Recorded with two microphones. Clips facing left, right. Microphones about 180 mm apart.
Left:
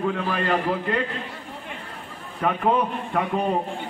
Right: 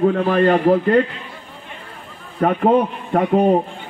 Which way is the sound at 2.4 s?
45° right (ahead or behind).